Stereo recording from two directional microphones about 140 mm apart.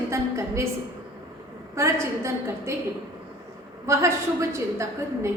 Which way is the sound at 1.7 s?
20° right (ahead or behind).